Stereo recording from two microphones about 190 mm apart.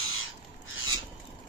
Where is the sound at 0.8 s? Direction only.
90° left.